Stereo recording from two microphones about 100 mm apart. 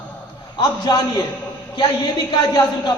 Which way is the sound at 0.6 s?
40° left (ahead or behind).